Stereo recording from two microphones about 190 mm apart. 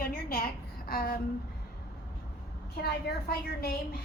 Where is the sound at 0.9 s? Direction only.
50° left (ahead or behind).